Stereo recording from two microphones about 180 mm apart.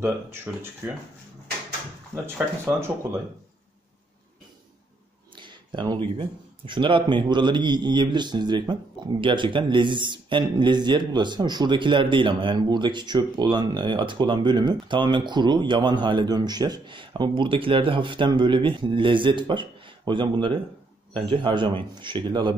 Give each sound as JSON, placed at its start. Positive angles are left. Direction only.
{"t": 0.0, "sound": "speech", "side_deg": -10}
{"t": 2.2, "sound": "speech", "side_deg": -15}
{"t": 5.3, "sound": "a man's voice", "side_deg": -25}